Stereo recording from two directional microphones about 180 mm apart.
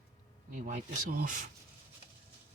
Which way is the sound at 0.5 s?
50° right (ahead or behind).